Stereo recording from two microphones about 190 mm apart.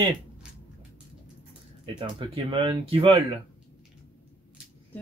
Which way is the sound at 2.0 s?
30° right (ahead or behind).